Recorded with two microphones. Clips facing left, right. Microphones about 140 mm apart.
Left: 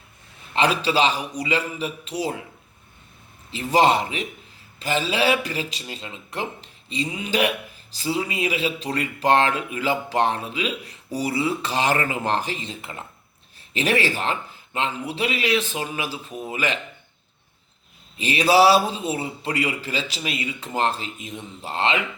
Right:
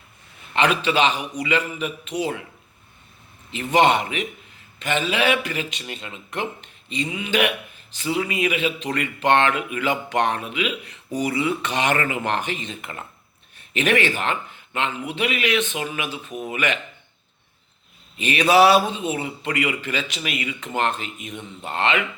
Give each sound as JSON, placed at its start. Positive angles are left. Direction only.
{"t": 0.5, "sound": "speech", "side_deg": 35}
{"t": 3.5, "sound": "speech", "side_deg": 35}
{"t": 18.2, "sound": "speech", "side_deg": 30}